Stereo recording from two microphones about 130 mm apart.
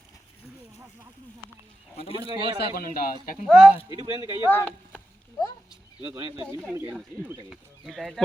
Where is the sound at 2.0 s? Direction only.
45° left (ahead or behind).